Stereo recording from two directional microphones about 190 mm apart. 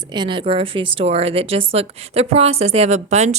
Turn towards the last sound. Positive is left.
turn(degrees=-35)  # may be behind; listen again after turning